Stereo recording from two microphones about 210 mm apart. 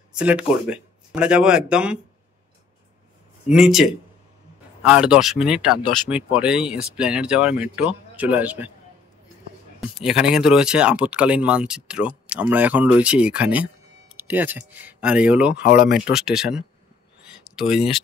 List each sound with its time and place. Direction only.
0.1 s speech: 5° right (ahead or behind)
3.4 s speech: centre (ahead or behind)
10.0 s speech: 5° right (ahead or behind)
15.7 s speech: 45° left (ahead or behind)
16.0 s speech: 5° right (ahead or behind)
17.2 s a sound: 5° right (ahead or behind)